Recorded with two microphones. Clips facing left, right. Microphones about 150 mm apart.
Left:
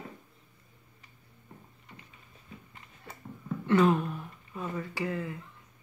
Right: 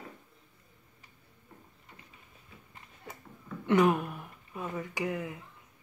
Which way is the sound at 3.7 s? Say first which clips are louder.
Left 1 dB; 15° right (ahead or behind).